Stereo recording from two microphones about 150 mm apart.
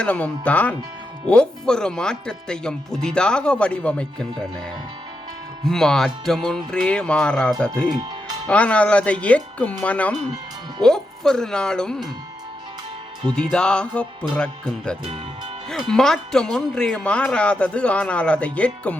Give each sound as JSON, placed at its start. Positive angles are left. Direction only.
{"t": 0.0, "sound": "speech", "side_deg": 10}
{"t": 5.6, "sound": "speech", "side_deg": 5}
{"t": 7.9, "sound": "speech", "side_deg": -30}
{"t": 8.4, "sound": "speech", "side_deg": 10}
{"t": 13.3, "sound": "speech", "side_deg": 5}